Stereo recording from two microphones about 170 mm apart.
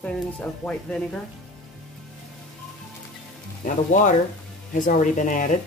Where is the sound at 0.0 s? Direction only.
10° left (ahead or behind).